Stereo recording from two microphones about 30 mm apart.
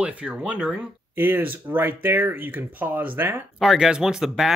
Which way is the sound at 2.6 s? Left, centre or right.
Right.